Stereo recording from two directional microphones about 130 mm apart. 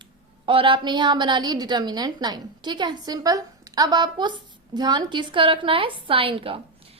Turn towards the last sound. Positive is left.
turn(degrees=-45)  # may be behind; listen again after turning